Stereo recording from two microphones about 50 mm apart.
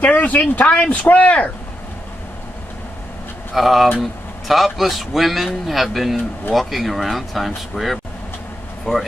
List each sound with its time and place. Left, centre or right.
0.0 s speech: left
0.7 s speech: centre
1.0 s speech: left
3.5 s a man's voice: centre